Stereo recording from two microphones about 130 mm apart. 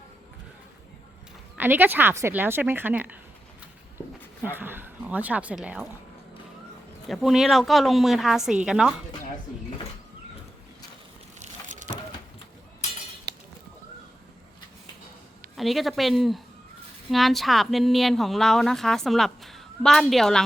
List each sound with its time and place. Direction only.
1.5 s speech: 15° right (ahead or behind)
4.4 s speech: 15° right (ahead or behind)
7.1 s a woman's voice: centre (ahead or behind)
11.3 s vehicle: 70° right (ahead or behind)
15.5 s a woman's voice: centre (ahead or behind)